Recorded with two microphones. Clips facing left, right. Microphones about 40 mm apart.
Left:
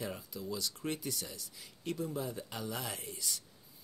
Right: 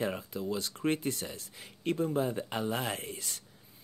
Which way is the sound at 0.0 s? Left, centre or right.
Right.